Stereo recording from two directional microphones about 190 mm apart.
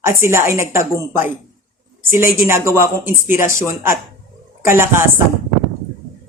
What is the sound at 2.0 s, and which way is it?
Speech, 10° right (ahead or behind).